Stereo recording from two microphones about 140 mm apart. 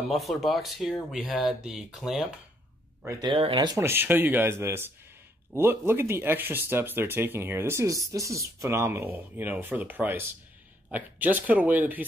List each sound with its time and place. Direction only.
0.1 s speech: centre (ahead or behind)
3.2 s speech: 35° right (ahead or behind)
3.8 s speech: 15° right (ahead or behind)